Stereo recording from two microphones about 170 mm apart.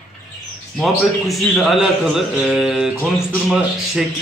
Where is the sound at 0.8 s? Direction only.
Centre (ahead or behind).